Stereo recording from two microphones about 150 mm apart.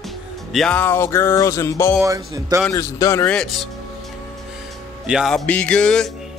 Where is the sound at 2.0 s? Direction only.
20° right (ahead or behind).